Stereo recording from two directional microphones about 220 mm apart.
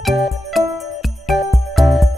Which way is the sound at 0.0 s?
Centre (ahead or behind).